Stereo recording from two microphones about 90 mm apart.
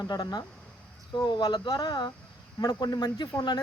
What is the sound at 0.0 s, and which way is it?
Speech, 50° left (ahead or behind).